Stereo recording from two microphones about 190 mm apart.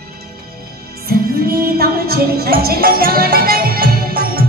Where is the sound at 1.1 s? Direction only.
55° right (ahead or behind).